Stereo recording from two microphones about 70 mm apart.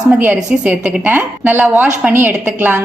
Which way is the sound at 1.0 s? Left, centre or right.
Right.